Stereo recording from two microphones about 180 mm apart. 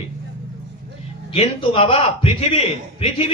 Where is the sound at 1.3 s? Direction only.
30° left (ahead or behind).